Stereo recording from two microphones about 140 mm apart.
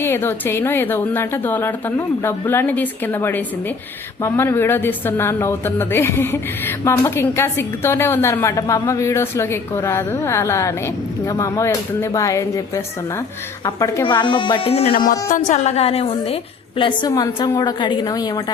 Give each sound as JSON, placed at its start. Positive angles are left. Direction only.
{"t": 0.0, "sound": "speech", "side_deg": 15}
{"t": 14.0, "sound": "a woman's voice", "side_deg": 35}
{"t": 15.3, "sound": "a woman's voice", "side_deg": 60}